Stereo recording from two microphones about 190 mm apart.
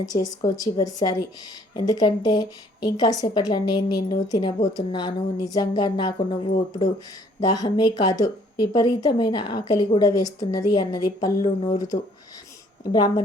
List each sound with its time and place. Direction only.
0.0 s a woman's voice: 20° left (ahead or behind)
12.8 s a woman's voice: 20° left (ahead or behind)